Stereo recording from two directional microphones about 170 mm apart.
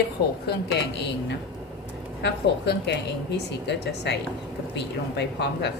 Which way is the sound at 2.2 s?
90° left.